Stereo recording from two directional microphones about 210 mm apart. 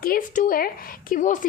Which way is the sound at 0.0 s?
40° left (ahead or behind).